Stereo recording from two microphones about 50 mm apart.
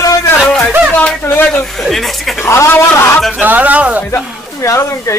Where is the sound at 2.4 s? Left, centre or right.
Left.